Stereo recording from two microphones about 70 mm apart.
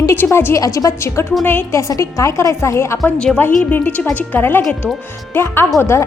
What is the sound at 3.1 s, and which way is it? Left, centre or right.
Speech, centre.